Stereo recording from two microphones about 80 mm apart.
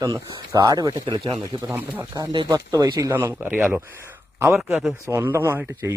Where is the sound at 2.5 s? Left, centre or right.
Right.